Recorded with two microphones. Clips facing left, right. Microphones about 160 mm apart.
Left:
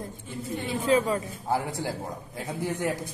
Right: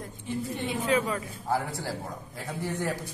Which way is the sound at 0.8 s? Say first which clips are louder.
Left 4 dB; 35° left (ahead or behind).